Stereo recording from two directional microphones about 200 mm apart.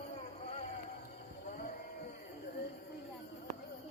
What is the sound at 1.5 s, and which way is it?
Sheep, 45° left (ahead or behind).